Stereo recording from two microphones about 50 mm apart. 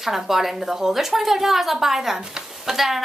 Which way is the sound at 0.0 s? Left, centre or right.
Centre.